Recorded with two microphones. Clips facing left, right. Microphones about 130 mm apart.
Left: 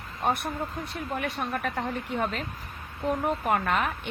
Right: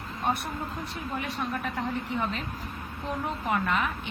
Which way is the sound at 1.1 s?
55° left (ahead or behind).